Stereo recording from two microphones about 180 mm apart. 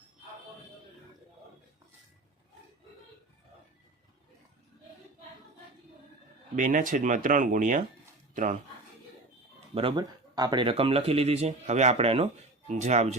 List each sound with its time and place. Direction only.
6.6 s speech: 45° right (ahead or behind)
9.7 s speech: 25° right (ahead or behind)